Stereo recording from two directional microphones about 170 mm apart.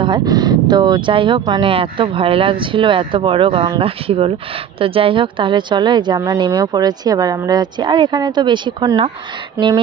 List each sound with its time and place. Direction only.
0.0 s a woman's voice: 25° right (ahead or behind)